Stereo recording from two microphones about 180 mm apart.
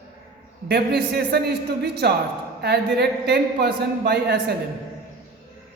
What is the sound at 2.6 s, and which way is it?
A woman's voice, 65° right (ahead or behind).